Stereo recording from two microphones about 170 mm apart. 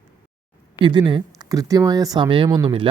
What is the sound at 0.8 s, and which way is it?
Speech, 25° right (ahead or behind).